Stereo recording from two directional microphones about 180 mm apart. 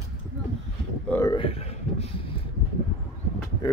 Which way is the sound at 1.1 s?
15° left (ahead or behind).